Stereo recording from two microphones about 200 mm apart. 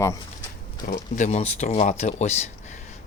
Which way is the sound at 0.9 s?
40° left (ahead or behind).